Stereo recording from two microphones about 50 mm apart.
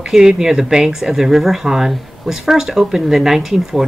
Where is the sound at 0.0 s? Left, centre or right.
Centre.